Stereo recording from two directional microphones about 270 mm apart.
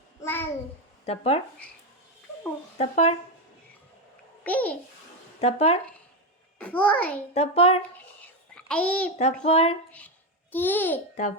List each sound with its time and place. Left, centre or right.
0.2 s a sound: centre
1.0 s speech: left
2.7 s speech: left
4.4 s a child's voice: centre
5.4 s speech: left
6.6 s a child's voice: centre
7.3 s speech: left
8.5 s a child's voice: centre
9.4 s speech: left
10.5 s a child's voice: centre